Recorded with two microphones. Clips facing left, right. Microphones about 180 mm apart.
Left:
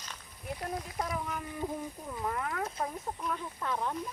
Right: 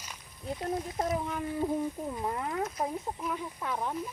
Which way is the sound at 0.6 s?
25° right (ahead or behind).